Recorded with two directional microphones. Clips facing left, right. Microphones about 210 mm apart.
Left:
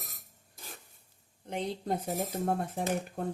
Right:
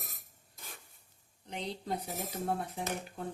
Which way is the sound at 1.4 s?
50° left (ahead or behind).